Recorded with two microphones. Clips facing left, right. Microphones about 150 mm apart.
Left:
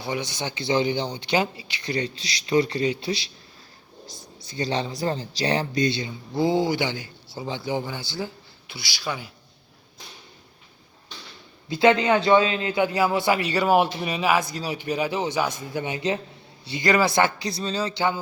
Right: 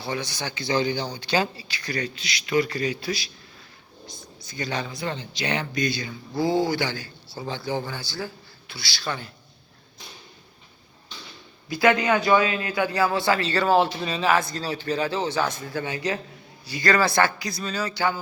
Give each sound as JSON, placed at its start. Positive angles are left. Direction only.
{"t": 0.0, "sound": "speech", "side_deg": 20}
{"t": 11.7, "sound": "a man's voice", "side_deg": 25}
{"t": 17.4, "sound": "speech", "side_deg": 30}